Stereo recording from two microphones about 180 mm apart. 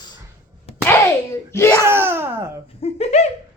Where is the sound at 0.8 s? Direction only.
15° left (ahead or behind).